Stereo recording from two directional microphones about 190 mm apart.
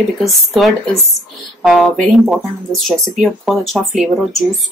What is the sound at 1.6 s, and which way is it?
Speech, centre (ahead or behind).